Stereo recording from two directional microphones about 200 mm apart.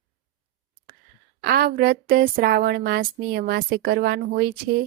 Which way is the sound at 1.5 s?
50° right (ahead or behind).